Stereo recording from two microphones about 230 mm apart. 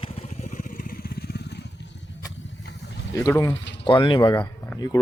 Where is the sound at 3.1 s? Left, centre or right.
Centre.